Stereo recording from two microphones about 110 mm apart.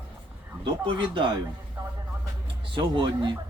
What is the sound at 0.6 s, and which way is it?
Speech, 50° right (ahead or behind).